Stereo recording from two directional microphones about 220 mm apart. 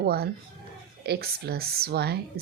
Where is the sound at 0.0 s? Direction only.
45° right (ahead or behind).